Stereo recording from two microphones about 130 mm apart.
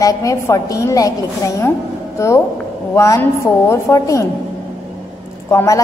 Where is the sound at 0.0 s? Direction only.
25° left (ahead or behind).